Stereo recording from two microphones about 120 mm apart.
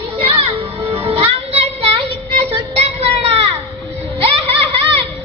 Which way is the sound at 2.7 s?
55° right (ahead or behind).